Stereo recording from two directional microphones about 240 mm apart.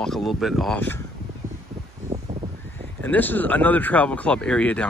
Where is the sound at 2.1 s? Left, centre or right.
Right.